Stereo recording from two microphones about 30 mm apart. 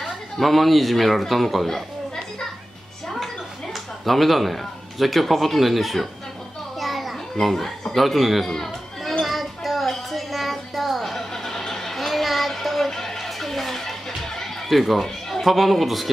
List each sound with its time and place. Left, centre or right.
0.0 s speech: centre
3.7 s speech: centre
6.8 s children playing: centre
7.4 s a man's voice: centre
9.2 s a sound: centre
14.7 s a man's voice: centre
15.0 s a sound: centre
15.4 s a man's voice: centre